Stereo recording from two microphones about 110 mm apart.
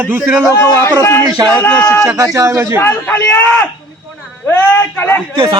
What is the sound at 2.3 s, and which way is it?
Speech, 30° right (ahead or behind).